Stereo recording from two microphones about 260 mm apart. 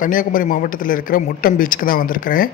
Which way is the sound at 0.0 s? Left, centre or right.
Left.